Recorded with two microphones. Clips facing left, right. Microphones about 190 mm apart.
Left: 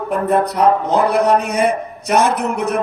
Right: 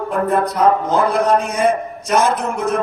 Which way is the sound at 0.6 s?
65° left (ahead or behind).